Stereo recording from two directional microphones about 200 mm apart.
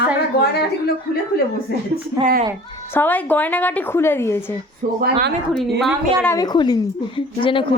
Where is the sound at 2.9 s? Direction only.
10° left (ahead or behind).